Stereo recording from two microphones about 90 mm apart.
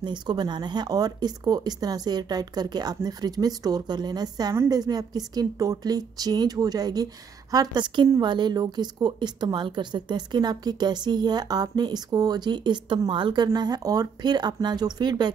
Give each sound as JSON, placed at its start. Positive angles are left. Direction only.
{"t": 0.0, "sound": "a woman's voice", "side_deg": -55}
{"t": 13.6, "sound": "speech", "side_deg": -45}